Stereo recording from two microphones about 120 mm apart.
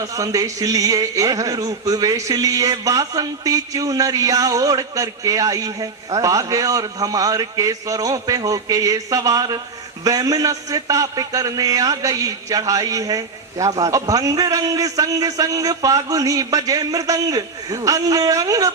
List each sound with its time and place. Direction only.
0.0 s a man's voice: 30° right (ahead or behind)